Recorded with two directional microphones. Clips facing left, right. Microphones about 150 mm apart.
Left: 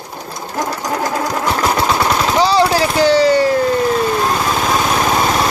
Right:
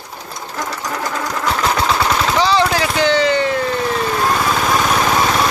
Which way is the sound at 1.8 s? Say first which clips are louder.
Left 1 dB; 15° left (ahead or behind).